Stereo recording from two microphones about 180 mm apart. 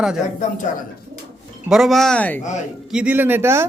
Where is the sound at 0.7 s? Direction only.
45° left (ahead or behind).